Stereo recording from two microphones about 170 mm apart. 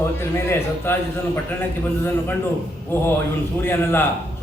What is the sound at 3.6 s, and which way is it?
Speech, 15° left (ahead or behind).